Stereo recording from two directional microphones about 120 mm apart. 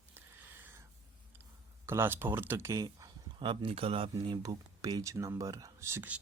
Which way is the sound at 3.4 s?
45° right (ahead or behind).